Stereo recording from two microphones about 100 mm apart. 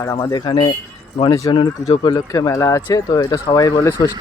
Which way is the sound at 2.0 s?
40° left (ahead or behind).